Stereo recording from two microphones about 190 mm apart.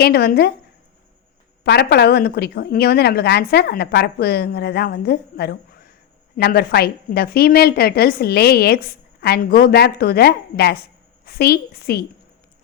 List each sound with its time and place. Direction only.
0.0 s a woman's voice: 55° left (ahead or behind)
1.6 s a woman's voice: 55° left (ahead or behind)